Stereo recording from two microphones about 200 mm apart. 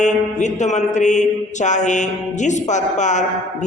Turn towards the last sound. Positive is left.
turn(degrees=35)  # may be behind; listen again after turning